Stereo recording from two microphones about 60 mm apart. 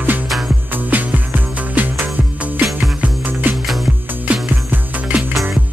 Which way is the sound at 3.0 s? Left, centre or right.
Right.